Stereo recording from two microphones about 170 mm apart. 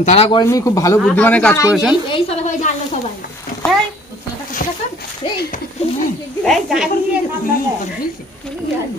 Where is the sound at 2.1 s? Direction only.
40° left (ahead or behind).